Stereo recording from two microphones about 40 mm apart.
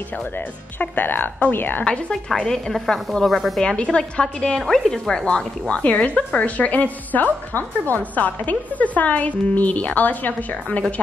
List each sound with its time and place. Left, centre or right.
0.7 s a woman's voice: left
2.3 s a woman's voice: centre
3.2 s speech: centre
3.6 s a woman's voice: left
5.2 s a woman's voice: left